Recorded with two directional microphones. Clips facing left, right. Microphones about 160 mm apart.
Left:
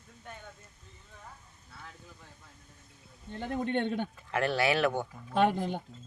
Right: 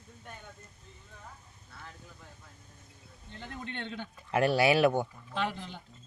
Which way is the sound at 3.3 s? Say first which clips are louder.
Left 10 dB; 50° left (ahead or behind).